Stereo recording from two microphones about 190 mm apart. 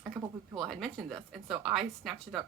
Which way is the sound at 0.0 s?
10° right (ahead or behind).